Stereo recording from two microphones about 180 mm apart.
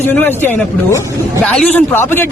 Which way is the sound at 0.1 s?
10° left (ahead or behind).